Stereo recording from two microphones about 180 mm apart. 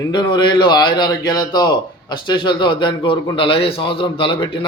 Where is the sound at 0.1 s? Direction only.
25° left (ahead or behind).